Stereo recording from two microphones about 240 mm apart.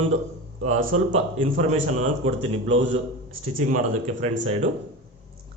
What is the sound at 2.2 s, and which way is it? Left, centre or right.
A man's voice, right.